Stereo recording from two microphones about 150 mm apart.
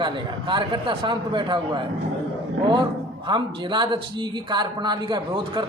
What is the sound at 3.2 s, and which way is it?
Speech, 30° right (ahead or behind).